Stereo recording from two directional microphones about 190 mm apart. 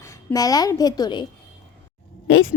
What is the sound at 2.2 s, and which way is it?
Speech, 90° left.